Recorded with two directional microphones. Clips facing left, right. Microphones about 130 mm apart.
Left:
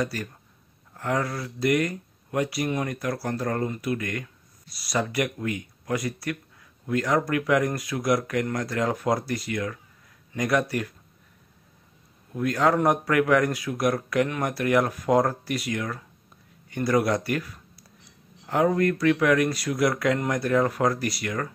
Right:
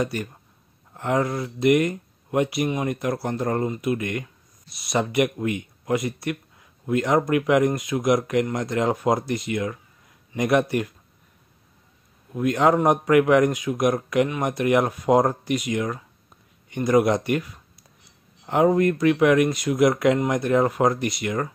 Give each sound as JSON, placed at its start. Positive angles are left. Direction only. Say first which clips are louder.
{"t": 0.0, "sound": "speech", "louder": "right 3 dB", "side_deg": -20}
{"t": 12.4, "sound": "speech", "louder": "right 3 dB", "side_deg": -20}